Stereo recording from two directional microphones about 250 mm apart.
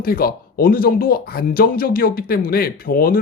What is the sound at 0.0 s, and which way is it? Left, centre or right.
Speech, left.